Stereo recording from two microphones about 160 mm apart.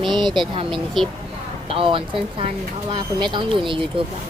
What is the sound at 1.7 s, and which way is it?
Speech, 35° right (ahead or behind).